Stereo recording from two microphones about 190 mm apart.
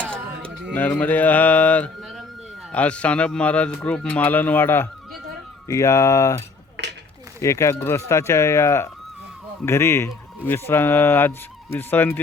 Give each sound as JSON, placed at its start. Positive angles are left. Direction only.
{"t": 0.0, "sound": "a sound", "side_deg": 5}
{"t": 0.7, "sound": "speech", "side_deg": 10}
{"t": 7.4, "sound": "speech", "side_deg": 15}